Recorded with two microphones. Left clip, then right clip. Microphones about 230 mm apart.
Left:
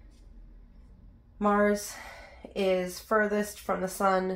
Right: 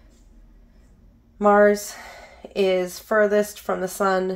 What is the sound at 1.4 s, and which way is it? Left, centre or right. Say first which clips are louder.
Speech: right 10 dB; right.